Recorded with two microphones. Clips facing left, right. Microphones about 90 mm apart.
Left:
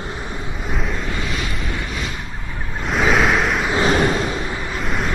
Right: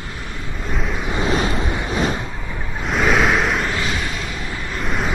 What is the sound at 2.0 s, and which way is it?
Vehicle, 35° right (ahead or behind).